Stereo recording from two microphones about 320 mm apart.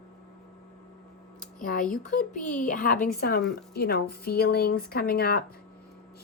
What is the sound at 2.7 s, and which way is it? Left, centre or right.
A woman's voice, left.